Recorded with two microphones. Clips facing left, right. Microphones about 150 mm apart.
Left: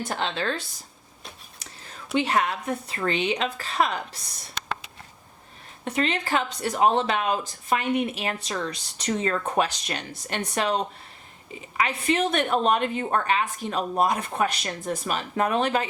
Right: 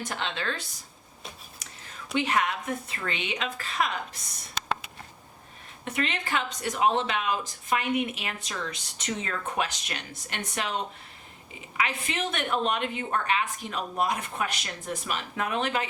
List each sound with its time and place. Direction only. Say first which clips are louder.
0.1 s speech: left 6 dB; 35° left (ahead or behind)
2.1 s speech: left 3 dB; 35° left (ahead or behind)
5.8 s speech: left 5 dB; 35° left (ahead or behind)
11.8 s speech: left 6 dB; 35° left (ahead or behind)